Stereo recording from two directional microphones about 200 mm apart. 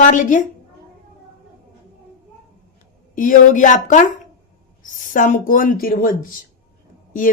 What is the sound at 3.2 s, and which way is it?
A woman's voice, 40° left (ahead or behind).